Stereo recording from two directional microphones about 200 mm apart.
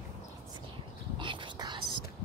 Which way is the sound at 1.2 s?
25° right (ahead or behind).